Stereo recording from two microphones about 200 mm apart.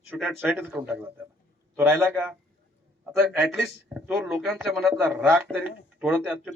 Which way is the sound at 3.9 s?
5° right (ahead or behind).